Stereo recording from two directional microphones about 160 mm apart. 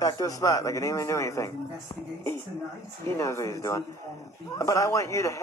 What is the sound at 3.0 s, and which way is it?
Speech, 20° left (ahead or behind).